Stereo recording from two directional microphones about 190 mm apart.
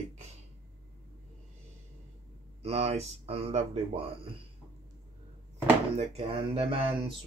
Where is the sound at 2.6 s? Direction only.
35° right (ahead or behind).